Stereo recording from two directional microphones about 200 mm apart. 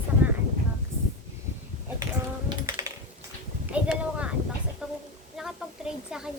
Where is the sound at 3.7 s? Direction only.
5° right (ahead or behind).